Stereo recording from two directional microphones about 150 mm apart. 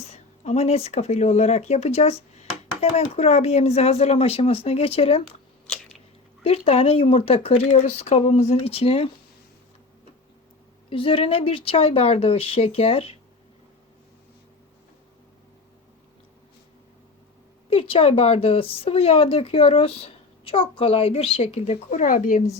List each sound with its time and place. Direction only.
0.0 s speech: 45° left (ahead or behind)
6.4 s speech: 40° left (ahead or behind)
10.8 s speech: 35° left (ahead or behind)
17.7 s speech: 40° left (ahead or behind); by 22.5 s 55° left (ahead or behind)